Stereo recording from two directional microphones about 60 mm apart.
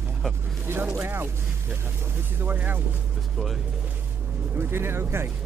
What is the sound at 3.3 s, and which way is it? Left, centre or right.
Speech, centre.